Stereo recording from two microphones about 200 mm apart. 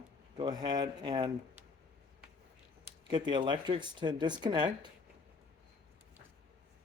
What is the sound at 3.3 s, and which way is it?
Speech, 25° right (ahead or behind).